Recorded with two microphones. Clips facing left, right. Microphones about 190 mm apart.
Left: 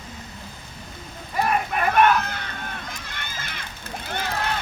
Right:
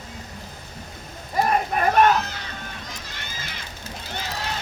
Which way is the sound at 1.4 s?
35° right (ahead or behind).